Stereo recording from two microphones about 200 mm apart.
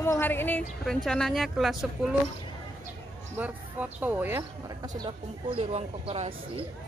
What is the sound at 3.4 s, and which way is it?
Speech, 10° right (ahead or behind).